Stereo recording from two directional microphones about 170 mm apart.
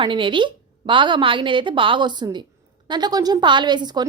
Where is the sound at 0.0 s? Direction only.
25° right (ahead or behind).